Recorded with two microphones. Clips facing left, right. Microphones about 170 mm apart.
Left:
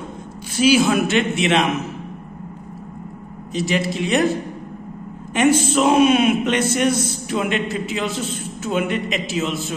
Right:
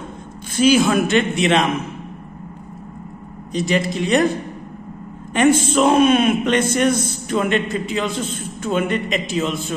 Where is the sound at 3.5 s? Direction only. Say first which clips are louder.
Right 2 dB; 5° left (ahead or behind).